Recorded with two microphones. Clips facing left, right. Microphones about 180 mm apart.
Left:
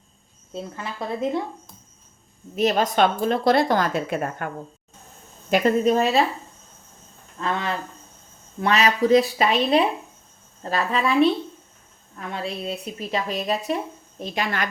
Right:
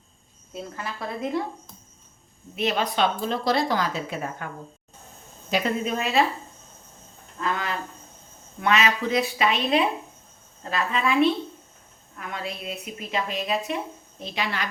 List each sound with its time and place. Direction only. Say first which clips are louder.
0.5 s speech: left 2 dB; 20° left (ahead or behind)
2.6 s a woman's voice: left 5 dB; 40° left (ahead or behind)
7.4 s a woman's voice: left 2 dB; 30° left (ahead or behind); by 14.7 s 50° left (ahead or behind)